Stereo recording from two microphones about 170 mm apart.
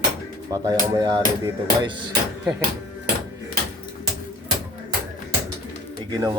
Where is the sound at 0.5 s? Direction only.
20° right (ahead or behind).